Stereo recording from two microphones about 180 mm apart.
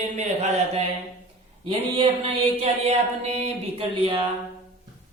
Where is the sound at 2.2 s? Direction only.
35° right (ahead or behind).